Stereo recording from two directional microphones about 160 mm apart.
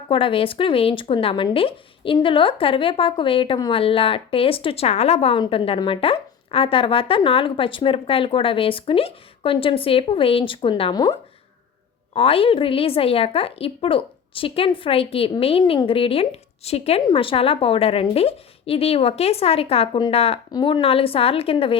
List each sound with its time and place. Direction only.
0.1 s a woman's voice: 35° left (ahead or behind)
12.1 s a woman's voice: 35° left (ahead or behind)
20.5 s a woman's voice: 30° left (ahead or behind)